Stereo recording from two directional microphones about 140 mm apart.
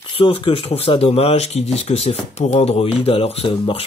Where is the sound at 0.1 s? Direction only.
40° left (ahead or behind).